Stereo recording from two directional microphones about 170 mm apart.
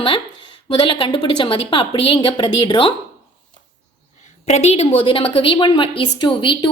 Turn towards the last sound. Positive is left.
turn(degrees=30)  # may be behind; listen again after turning